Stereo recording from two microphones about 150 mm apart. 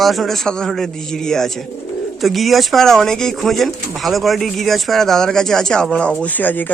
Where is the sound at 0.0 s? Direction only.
Centre (ahead or behind).